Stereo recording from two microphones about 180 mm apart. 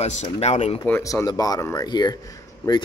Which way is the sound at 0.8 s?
15° left (ahead or behind).